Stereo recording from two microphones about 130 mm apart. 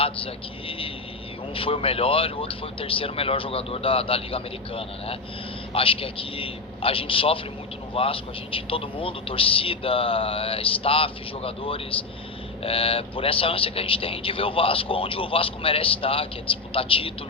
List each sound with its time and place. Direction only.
0.0 s vehicle: 45° left (ahead or behind)
1.5 s a man's voice: 45° left (ahead or behind)